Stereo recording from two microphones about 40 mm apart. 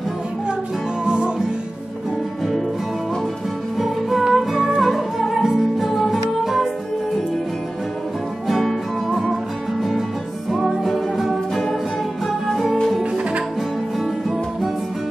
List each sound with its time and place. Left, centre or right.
1.0 s music: right
3.7 s music: centre
9.3 s music: centre
13.0 s guitar: right